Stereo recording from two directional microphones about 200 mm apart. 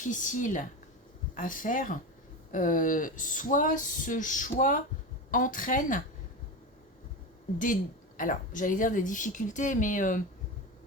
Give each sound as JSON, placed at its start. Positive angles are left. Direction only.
{"t": 0.0, "sound": "speech", "side_deg": 40}
{"t": 7.6, "sound": "speech", "side_deg": 40}